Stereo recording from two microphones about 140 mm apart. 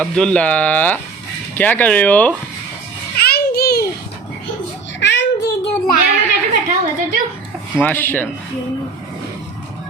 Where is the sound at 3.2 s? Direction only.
90° left.